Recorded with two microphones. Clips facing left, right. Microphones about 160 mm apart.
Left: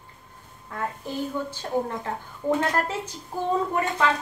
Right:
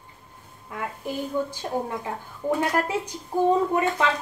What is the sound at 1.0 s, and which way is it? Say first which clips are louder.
A woman's voice: right 5 dB; 15° right (ahead or behind).